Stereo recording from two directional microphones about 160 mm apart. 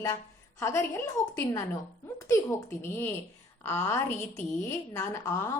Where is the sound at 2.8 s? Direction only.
15° left (ahead or behind).